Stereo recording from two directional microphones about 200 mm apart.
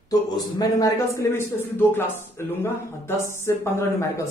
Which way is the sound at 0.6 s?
15° left (ahead or behind).